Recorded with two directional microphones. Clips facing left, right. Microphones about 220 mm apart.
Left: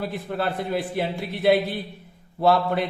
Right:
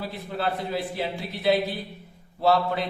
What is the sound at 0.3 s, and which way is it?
A man's voice, 55° left (ahead or behind).